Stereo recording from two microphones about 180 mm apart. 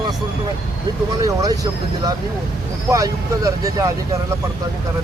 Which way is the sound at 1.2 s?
20° right (ahead or behind).